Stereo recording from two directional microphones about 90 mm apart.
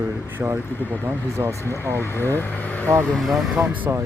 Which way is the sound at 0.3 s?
20° right (ahead or behind).